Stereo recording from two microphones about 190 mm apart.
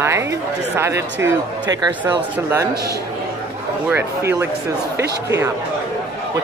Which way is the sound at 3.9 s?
10° right (ahead or behind).